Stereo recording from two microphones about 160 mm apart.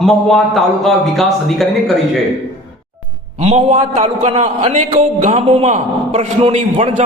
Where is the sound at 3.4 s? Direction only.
40° right (ahead or behind).